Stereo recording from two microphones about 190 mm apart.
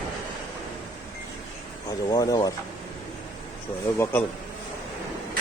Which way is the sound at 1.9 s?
20° left (ahead or behind).